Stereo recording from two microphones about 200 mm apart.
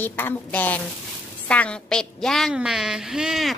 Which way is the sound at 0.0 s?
10° left (ahead or behind).